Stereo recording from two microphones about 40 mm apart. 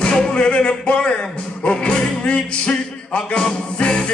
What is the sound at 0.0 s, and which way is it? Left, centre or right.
Music, left.